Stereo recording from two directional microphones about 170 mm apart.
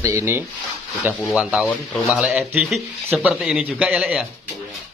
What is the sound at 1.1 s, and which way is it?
A man's voice, centre (ahead or behind).